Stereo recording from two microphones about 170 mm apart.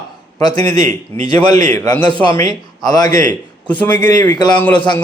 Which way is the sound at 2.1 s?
30° right (ahead or behind).